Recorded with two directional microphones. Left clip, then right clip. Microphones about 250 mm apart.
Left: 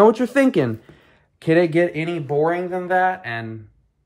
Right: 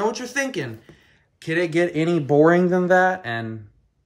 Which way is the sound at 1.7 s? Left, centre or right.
Centre.